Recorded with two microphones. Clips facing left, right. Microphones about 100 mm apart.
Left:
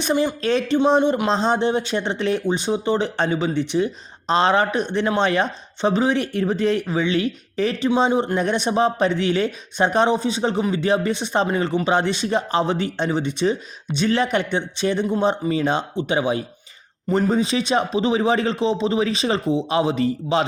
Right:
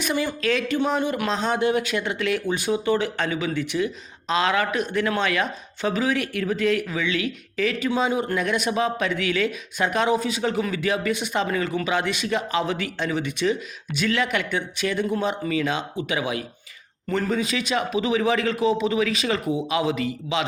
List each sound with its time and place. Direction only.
0.0 s speech: 25° left (ahead or behind)